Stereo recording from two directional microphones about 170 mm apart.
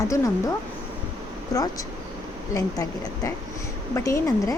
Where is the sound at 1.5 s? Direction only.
20° left (ahead or behind).